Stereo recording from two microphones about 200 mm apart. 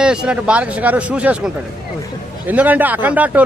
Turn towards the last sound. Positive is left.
turn(degrees=-10)  # may be behind; listen again after turning